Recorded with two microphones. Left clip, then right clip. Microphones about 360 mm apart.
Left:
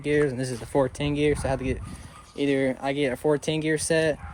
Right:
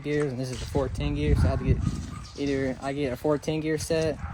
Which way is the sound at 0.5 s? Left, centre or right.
Centre.